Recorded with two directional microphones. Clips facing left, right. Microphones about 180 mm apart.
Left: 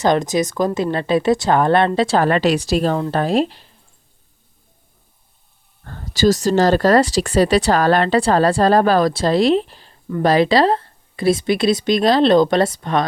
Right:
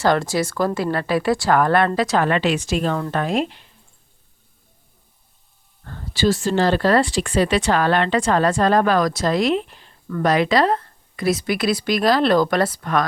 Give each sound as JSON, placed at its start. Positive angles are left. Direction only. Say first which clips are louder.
{"t": 0.0, "sound": "speech", "louder": "left 2 dB", "side_deg": 20}
{"t": 5.8, "sound": "speech", "louder": "left 4 dB", "side_deg": 40}